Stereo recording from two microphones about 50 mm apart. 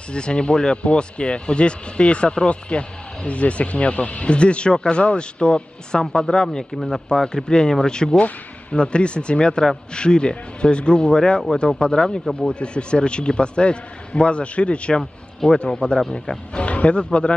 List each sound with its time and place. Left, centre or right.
0.1 s speech: centre
15.0 s speech: centre